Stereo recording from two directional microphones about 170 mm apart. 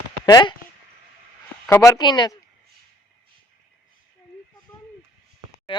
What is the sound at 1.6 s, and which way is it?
Speech, 15° left (ahead or behind).